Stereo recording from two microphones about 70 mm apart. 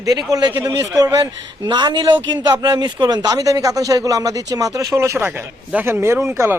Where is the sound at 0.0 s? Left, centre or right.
Right.